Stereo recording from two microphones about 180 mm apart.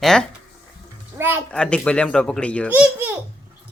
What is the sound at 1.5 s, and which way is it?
Speech, 5° left (ahead or behind).